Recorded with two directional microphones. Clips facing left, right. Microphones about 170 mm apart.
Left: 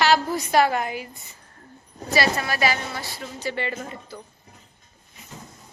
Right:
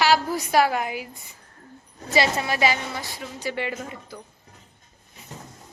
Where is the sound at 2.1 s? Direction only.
20° right (ahead or behind).